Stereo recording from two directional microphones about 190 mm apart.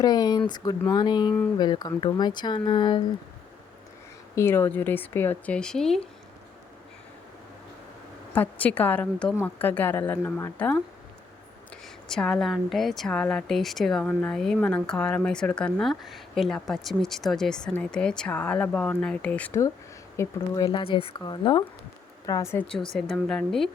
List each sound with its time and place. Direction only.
0.0 s speech: 20° left (ahead or behind)
4.4 s speech: 10° left (ahead or behind)
8.4 s speech: 10° left (ahead or behind); by 21.7 s 25° left (ahead or behind)
22.3 s speech: 15° left (ahead or behind)
22.9 s speech: 5° left (ahead or behind)